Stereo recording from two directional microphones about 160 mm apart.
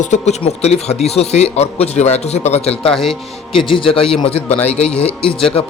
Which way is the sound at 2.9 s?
Centre (ahead or behind).